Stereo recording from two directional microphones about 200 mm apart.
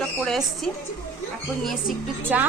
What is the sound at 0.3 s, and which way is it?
Speech, centre (ahead or behind).